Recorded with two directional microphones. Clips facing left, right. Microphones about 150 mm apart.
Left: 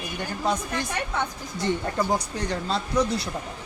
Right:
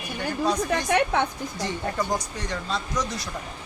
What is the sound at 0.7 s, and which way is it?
Speech, 75° right (ahead or behind).